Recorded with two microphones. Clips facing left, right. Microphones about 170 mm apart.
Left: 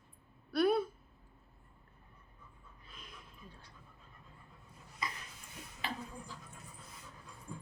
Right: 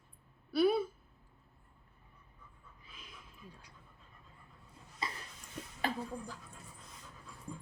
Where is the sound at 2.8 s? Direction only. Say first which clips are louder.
Left 1 dB; 5° right (ahead or behind).